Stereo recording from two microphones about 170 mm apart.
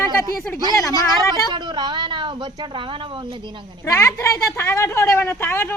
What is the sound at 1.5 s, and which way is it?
Speech, 25° right (ahead or behind).